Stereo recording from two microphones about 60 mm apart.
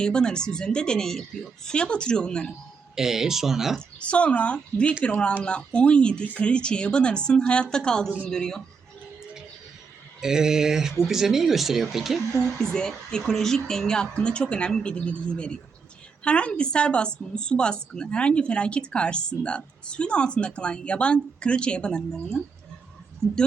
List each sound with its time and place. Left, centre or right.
0.0 s a woman's voice: centre
2.9 s speech: centre
3.8 s a woman's voice: centre
10.2 s speech: centre
12.3 s a woman's voice: centre